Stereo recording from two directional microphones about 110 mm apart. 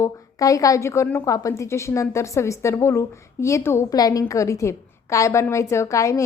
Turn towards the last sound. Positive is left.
turn(degrees=30)  # may be behind; listen again after turning